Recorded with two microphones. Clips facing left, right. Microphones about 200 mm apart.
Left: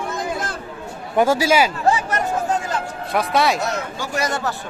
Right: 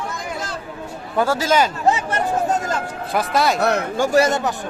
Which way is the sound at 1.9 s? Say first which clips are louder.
Even; 20° right (ahead or behind).